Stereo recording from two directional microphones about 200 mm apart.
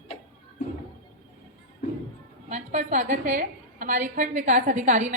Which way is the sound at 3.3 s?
40° right (ahead or behind).